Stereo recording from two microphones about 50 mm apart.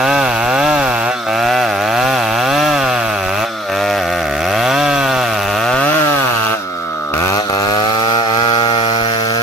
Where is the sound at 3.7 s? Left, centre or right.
Centre.